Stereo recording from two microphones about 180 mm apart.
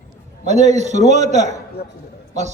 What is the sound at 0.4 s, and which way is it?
A man's voice, 40° right (ahead or behind).